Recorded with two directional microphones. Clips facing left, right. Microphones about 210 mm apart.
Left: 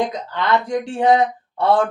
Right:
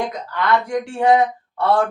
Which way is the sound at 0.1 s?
20° left (ahead or behind).